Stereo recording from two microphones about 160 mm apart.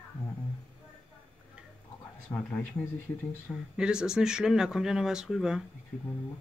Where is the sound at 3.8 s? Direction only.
5° right (ahead or behind).